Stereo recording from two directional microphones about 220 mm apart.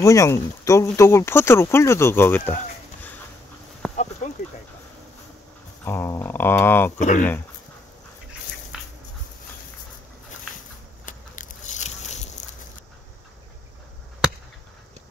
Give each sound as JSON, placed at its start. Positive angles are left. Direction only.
{"t": 0.0, "sound": "speech", "side_deg": 15}
{"t": 3.9, "sound": "a sound", "side_deg": 30}
{"t": 5.9, "sound": "speech", "side_deg": 10}
{"t": 7.0, "sound": "speech", "side_deg": 35}
{"t": 8.7, "sound": "dog", "side_deg": 0}
{"t": 11.1, "sound": "a sound", "side_deg": 35}